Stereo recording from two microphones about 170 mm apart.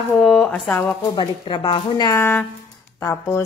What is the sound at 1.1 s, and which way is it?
A woman's voice, 30° left (ahead or behind).